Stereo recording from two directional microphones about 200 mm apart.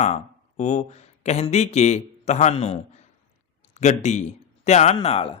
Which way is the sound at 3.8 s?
35° left (ahead or behind).